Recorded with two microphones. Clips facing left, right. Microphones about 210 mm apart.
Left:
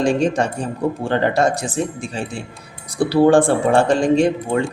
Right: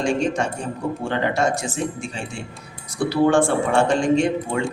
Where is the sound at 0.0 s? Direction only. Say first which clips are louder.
Left 4 dB; 35° left (ahead or behind).